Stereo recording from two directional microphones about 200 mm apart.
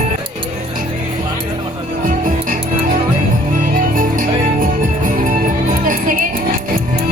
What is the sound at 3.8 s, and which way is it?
Music, 40° right (ahead or behind).